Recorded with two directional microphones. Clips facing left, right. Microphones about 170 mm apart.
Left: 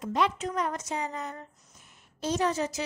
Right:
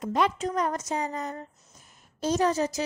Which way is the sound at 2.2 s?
40° right (ahead or behind).